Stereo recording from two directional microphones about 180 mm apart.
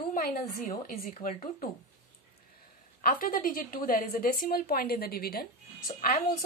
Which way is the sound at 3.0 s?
50° left (ahead or behind).